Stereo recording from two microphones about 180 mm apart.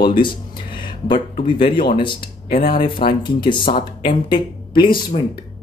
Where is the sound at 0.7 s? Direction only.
25° left (ahead or behind).